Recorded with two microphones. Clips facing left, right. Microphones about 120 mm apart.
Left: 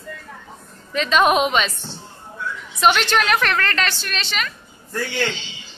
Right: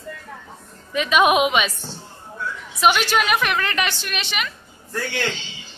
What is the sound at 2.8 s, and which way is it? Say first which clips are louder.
A woman's voice: left 1 dB; 10° right (ahead or behind).